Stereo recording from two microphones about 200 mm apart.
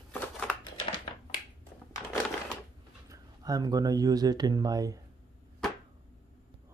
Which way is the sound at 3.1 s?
15° right (ahead or behind).